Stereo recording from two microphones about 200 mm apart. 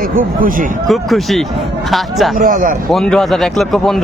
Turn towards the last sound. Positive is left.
turn(degrees=0)  # may be behind; listen again after turning